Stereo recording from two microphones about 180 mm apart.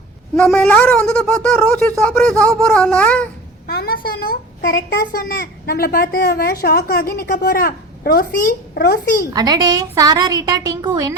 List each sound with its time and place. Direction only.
0.3 s a sound: 5° left (ahead or behind)
3.7 s a child's voice: 60° left (ahead or behind)
9.3 s a woman's voice: 20° right (ahead or behind)